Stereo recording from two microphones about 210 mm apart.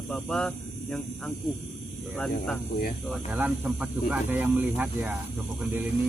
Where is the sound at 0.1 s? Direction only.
5° left (ahead or behind).